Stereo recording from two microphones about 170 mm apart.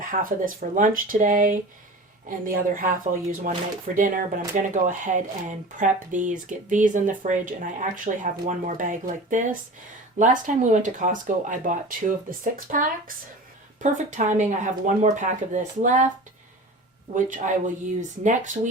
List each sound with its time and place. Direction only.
0.0 s speech: 55° right (ahead or behind)
17.2 s speech: 50° right (ahead or behind)